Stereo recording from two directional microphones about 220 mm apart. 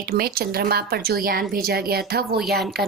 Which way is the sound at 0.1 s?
45° right (ahead or behind).